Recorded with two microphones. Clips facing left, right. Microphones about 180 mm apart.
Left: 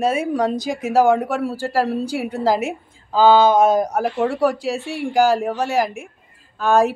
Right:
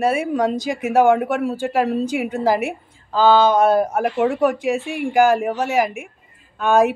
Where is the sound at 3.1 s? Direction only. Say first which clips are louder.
Left 1 dB; 10° left (ahead or behind).